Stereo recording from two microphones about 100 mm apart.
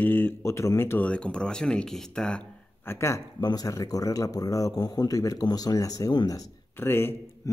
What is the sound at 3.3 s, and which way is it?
Speech, 40° left (ahead or behind).